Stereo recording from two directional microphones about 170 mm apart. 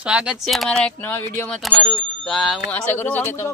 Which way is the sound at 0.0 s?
5° right (ahead or behind).